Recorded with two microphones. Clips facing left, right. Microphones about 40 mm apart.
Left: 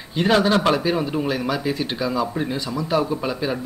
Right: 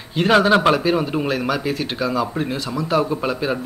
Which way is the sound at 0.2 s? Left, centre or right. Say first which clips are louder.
Right 3 dB; centre.